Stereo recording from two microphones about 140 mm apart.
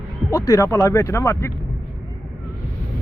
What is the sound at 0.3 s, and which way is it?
Speech, 20° left (ahead or behind).